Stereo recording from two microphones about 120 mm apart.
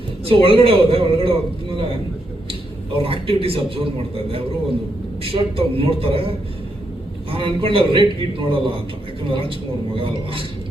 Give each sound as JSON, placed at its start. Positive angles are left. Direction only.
{"t": 0.3, "sound": "a man's voice", "side_deg": -50}
{"t": 3.0, "sound": "a man's voice", "side_deg": -50}